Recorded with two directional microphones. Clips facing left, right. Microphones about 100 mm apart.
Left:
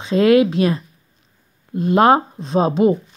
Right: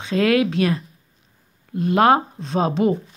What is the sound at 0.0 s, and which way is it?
Speech, 25° left (ahead or behind).